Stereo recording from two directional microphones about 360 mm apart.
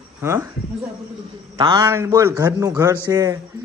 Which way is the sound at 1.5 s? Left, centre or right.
Centre.